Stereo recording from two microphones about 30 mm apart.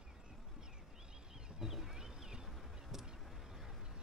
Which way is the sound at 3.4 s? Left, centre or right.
Centre.